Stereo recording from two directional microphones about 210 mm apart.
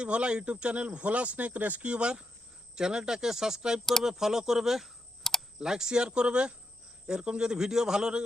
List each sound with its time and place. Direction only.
0.0 s speech: 5° right (ahead or behind)